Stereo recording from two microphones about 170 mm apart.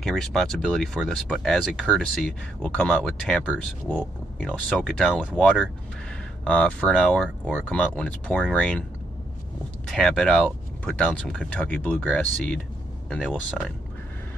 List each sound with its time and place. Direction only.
0.0 s speech: 5° left (ahead or behind)
9.8 s speech: 5° left (ahead or behind)